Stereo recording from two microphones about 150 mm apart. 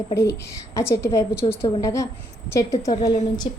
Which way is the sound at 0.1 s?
20° left (ahead or behind).